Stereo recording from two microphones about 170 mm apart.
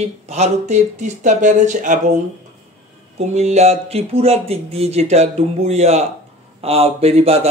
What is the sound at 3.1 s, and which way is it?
Speech, 40° right (ahead or behind).